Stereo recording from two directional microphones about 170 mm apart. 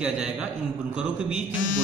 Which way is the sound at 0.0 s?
5° right (ahead or behind).